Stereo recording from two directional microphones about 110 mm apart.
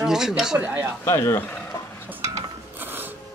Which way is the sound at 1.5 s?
15° left (ahead or behind).